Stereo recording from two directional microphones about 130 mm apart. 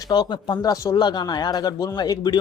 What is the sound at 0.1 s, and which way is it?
A man's voice, 35° left (ahead or behind).